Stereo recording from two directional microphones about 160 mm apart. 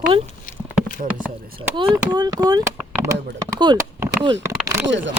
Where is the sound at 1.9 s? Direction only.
25° right (ahead or behind).